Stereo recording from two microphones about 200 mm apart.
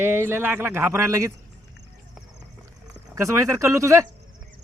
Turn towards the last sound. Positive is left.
turn(degrees=-15)  # may be behind; listen again after turning